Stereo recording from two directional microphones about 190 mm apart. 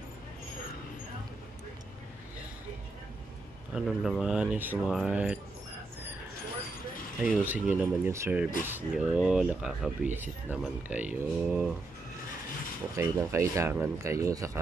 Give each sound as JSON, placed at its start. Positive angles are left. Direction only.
{"t": 3.7, "sound": "speech", "side_deg": 0}
{"t": 7.2, "sound": "speech", "side_deg": -5}
{"t": 12.9, "sound": "speech", "side_deg": -15}